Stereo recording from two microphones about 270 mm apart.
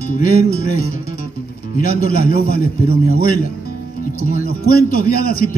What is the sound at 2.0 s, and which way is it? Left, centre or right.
A man's voice, left.